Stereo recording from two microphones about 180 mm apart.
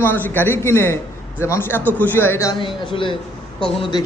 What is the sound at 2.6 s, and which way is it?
Speech, 25° left (ahead or behind).